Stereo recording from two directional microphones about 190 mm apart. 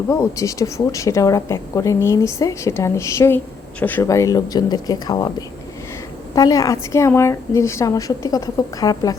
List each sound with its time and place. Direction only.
0.1 s a woman's voice: 15° left (ahead or behind)
6.3 s a woman's voice: 20° left (ahead or behind)